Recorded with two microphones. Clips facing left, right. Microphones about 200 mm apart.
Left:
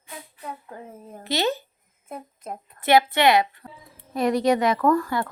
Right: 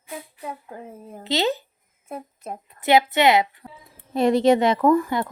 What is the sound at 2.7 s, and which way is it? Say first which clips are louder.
Speech: right 1 dB; 20° right (ahead or behind).